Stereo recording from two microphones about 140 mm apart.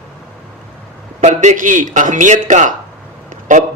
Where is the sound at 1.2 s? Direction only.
55° right (ahead or behind).